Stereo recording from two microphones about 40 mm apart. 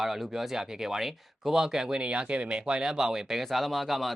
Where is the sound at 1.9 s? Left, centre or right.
Right.